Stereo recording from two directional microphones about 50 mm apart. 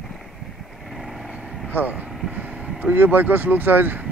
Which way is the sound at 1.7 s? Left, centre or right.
Right.